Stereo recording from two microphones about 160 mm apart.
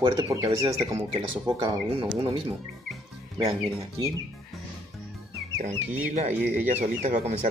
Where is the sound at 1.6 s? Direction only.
35° right (ahead or behind).